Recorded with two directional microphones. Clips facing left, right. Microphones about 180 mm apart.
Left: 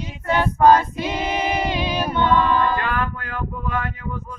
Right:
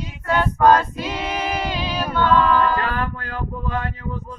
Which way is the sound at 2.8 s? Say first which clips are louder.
Left 1 dB; 35° right (ahead or behind).